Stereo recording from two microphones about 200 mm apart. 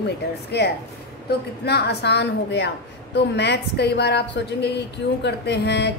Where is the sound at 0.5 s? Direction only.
55° left (ahead or behind).